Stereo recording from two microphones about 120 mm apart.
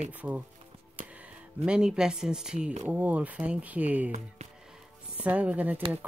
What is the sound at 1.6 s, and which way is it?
Speech, 5° right (ahead or behind).